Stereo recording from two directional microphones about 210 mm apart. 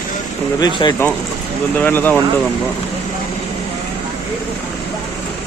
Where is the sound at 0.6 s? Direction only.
20° left (ahead or behind).